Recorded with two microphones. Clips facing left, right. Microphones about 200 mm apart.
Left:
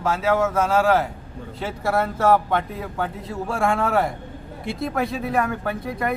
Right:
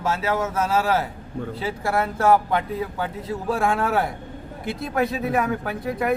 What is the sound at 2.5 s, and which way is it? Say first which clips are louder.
Speech: even; centre (ahead or behind).